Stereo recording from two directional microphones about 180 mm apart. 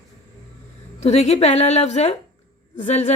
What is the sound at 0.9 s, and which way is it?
A woman's voice, 35° left (ahead or behind).